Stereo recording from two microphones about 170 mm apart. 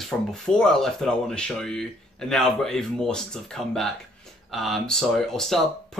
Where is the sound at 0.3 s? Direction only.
5° left (ahead or behind).